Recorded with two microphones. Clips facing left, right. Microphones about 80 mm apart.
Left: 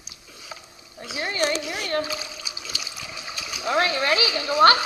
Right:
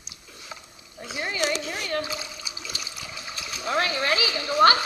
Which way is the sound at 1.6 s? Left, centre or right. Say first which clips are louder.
Left 2 dB; centre.